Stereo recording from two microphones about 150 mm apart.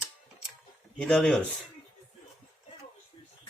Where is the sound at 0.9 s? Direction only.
5° left (ahead or behind).